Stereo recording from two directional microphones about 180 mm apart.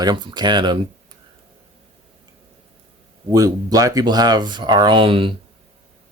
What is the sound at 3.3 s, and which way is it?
Speech, 20° right (ahead or behind).